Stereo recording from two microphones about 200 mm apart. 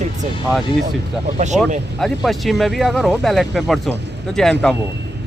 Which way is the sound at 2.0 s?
Centre (ahead or behind).